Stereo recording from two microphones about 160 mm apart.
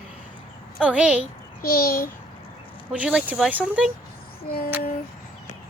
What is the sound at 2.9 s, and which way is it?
Speech, 5° right (ahead or behind).